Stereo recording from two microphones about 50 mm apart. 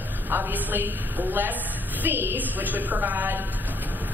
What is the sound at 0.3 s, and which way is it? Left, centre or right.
A woman's voice, right.